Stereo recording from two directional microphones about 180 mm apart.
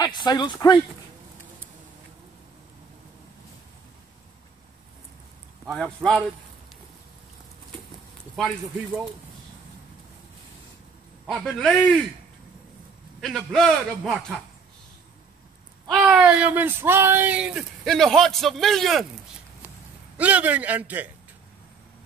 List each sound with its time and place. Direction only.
0.0 s speech: 25° left (ahead or behind)
5.7 s speech: centre (ahead or behind)
11.2 s speech: 5° left (ahead or behind)
13.2 s speech: centre (ahead or behind)
15.9 s speech: 5° right (ahead or behind)
20.2 s a man's voice: 10° right (ahead or behind)